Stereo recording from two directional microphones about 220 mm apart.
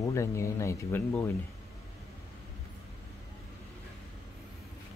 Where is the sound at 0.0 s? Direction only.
15° left (ahead or behind).